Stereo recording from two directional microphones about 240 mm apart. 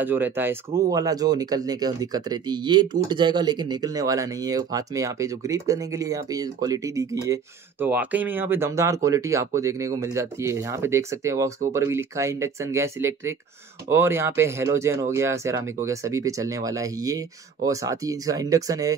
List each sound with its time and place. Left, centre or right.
0.0 s speech: centre